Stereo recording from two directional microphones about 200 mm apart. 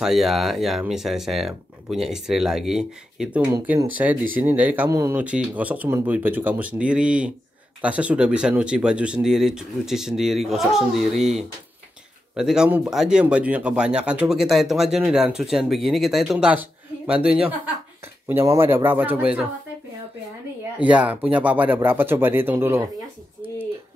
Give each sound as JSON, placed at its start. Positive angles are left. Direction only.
{"t": 0.0, "sound": "speech", "side_deg": 0}
{"t": 20.8, "sound": "speech", "side_deg": -5}